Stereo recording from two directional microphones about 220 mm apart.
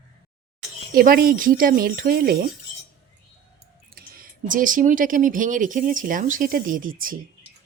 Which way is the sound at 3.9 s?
40° right (ahead or behind).